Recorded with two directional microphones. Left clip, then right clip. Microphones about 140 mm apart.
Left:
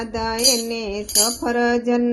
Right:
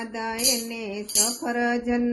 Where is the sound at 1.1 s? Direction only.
20° left (ahead or behind).